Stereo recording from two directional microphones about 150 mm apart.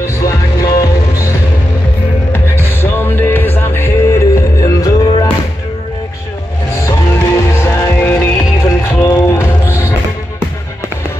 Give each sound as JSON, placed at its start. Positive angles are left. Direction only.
{"t": 0.0, "sound": "music", "side_deg": 20}
{"t": 2.3, "sound": "music", "side_deg": 15}
{"t": 6.9, "sound": "music", "side_deg": 20}